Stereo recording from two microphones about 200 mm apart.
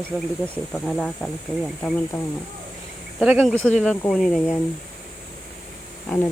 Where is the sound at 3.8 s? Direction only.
5° left (ahead or behind).